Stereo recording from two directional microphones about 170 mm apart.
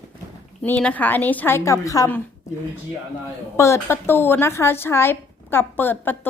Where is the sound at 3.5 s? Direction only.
15° left (ahead or behind).